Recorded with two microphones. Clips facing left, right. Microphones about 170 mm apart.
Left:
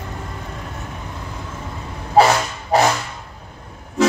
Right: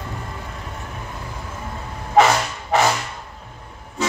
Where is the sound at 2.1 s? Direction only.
35° left (ahead or behind).